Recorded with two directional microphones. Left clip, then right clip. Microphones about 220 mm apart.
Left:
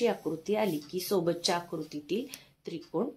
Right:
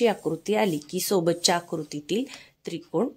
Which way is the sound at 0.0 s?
50° right (ahead or behind).